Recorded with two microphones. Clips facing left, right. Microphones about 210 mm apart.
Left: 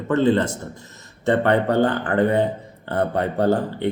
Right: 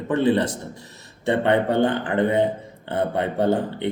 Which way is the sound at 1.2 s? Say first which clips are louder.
Left 1 dB; 15° right (ahead or behind).